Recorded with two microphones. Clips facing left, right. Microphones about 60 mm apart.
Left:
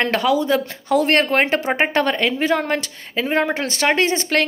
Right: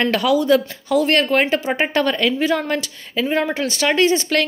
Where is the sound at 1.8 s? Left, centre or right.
Left.